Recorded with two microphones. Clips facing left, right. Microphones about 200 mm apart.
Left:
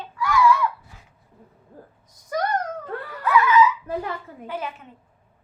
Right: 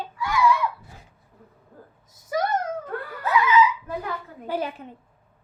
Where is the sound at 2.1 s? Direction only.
5° right (ahead or behind).